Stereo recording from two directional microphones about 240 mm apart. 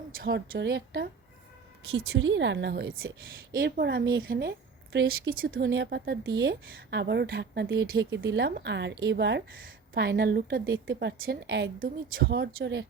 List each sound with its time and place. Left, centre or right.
0.2 s a woman's voice: right
2.1 s a woman's voice: right